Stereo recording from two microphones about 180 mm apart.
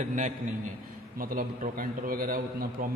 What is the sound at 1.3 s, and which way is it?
A man's voice, 50° right (ahead or behind).